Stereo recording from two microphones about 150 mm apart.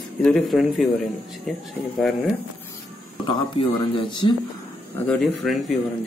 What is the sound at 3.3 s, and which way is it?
Speech, 35° left (ahead or behind).